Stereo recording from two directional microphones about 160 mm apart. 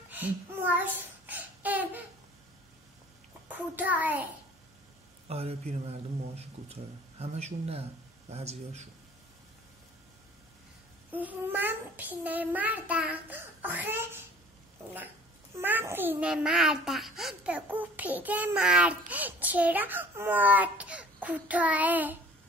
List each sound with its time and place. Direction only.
0.1 s a sound: 10° right (ahead or behind)
3.4 s a child's voice: 10° right (ahead or behind)
5.3 s a man's voice: 40° right (ahead or behind)
11.1 s a child's voice: 10° right (ahead or behind)
15.5 s a child's voice: 15° right (ahead or behind)